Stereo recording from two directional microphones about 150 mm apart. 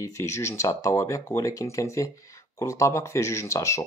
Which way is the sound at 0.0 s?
20° left (ahead or behind).